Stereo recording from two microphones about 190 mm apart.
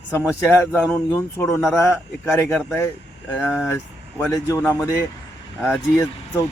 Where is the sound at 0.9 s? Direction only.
5° left (ahead or behind).